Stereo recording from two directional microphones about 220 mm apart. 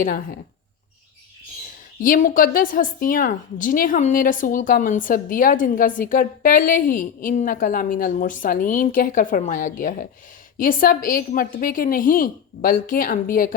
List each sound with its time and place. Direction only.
2.0 s a woman's voice: 40° left (ahead or behind)